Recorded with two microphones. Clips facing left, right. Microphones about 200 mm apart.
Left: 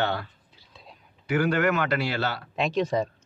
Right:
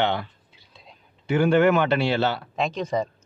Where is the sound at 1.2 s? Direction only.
25° right (ahead or behind).